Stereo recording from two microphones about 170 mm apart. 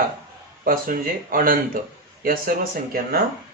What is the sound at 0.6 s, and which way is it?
Speech, 55° right (ahead or behind).